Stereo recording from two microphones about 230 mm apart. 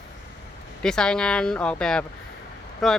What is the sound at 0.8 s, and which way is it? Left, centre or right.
Speech, centre.